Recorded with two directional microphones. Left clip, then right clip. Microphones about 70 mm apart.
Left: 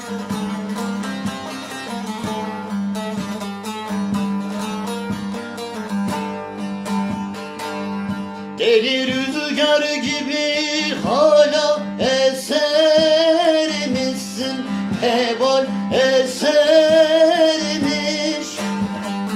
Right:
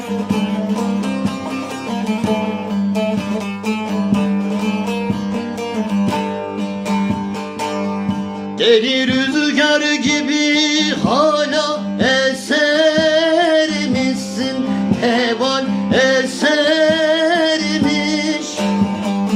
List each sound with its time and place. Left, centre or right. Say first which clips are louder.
8.6 s music: right 3 dB; centre